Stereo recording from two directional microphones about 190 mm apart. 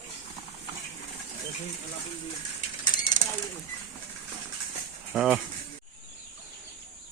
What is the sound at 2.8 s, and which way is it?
Mechanisms, 45° left (ahead or behind).